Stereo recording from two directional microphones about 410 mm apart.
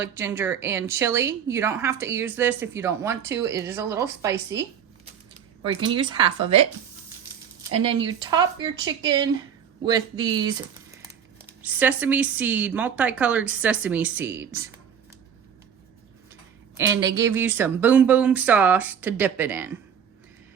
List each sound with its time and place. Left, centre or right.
0.0 s a woman's voice: centre
5.6 s a woman's voice: centre
8.2 s a woman's voice: centre
16.7 s speech: centre